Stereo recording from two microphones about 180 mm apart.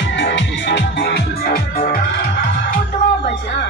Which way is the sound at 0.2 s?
80° left.